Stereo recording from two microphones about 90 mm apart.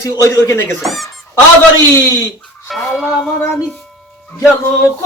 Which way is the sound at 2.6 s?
Centre (ahead or behind).